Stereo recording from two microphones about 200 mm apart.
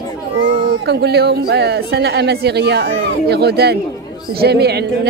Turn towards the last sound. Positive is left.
turn(degrees=-55)  # may be behind; listen again after turning